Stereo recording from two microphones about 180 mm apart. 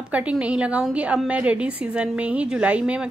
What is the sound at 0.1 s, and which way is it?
A woman's voice, 5° right (ahead or behind).